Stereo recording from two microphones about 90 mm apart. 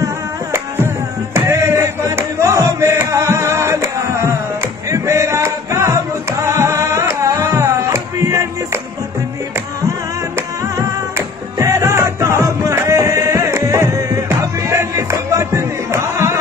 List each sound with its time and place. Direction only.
0.0 s music: 30° right (ahead or behind)
4.8 s a sound: 35° right (ahead or behind)
6.4 s music: 35° right (ahead or behind)
10.8 s music: 40° right (ahead or behind)